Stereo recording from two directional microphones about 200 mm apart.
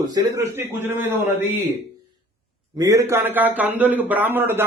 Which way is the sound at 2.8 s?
15° right (ahead or behind).